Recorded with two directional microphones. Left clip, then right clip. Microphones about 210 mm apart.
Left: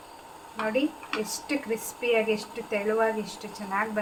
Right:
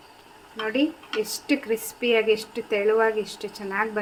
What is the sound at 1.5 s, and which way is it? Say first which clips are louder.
Speech: right 5 dB; 45° right (ahead or behind).